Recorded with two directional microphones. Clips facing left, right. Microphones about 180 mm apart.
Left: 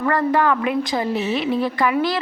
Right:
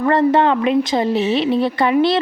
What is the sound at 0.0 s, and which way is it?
A woman's voice, 25° right (ahead or behind).